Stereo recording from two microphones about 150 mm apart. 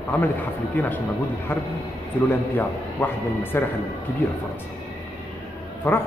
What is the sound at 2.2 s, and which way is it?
Speech, 10° left (ahead or behind).